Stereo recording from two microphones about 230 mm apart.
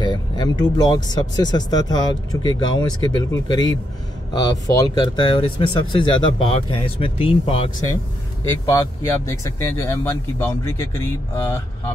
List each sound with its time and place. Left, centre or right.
0.0 s speech: centre
8.5 s speech: centre